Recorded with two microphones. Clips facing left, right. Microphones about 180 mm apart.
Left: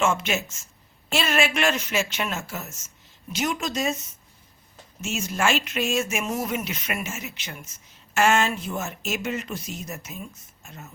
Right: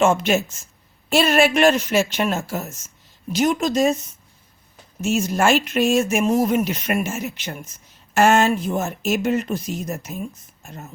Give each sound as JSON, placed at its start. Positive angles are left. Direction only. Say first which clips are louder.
{"t": 1.1, "sound": "speech", "louder": "right 8 dB", "side_deg": -40}
{"t": 5.2, "sound": "speech", "louder": "right 4 dB", "side_deg": -45}
{"t": 7.4, "sound": "speech", "louder": "right 7 dB", "side_deg": -40}